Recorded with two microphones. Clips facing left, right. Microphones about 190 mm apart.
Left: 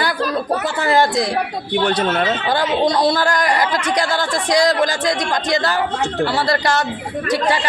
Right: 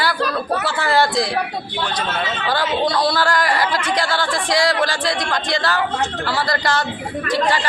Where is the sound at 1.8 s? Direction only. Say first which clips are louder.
Left 6 dB; 65° left (ahead or behind).